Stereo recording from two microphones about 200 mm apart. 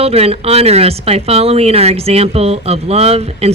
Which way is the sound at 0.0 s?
30° right (ahead or behind).